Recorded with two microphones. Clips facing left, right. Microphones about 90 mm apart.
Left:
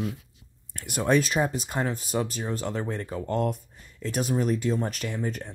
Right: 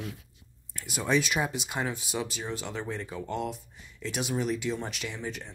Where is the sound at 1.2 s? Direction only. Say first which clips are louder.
Left 4 dB; 35° left (ahead or behind).